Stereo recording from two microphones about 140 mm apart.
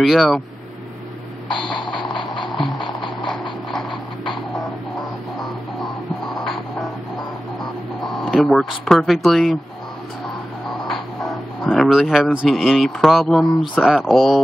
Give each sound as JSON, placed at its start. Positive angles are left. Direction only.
{"t": 0.0, "sound": "speech", "side_deg": 0}
{"t": 1.9, "sound": "vehicle", "side_deg": 5}
{"t": 2.1, "sound": "music", "side_deg": 35}
{"t": 2.5, "sound": "music", "side_deg": 0}
{"t": 5.4, "sound": "music", "side_deg": 0}
{"t": 7.6, "sound": "speech", "side_deg": 0}
{"t": 10.9, "sound": "a sound", "side_deg": 0}
{"t": 12.4, "sound": "speech", "side_deg": 0}